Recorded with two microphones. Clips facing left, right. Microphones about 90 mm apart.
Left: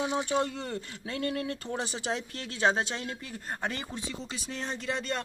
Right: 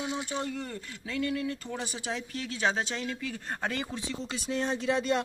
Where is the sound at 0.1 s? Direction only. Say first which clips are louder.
Left 4 dB; 45° left (ahead or behind).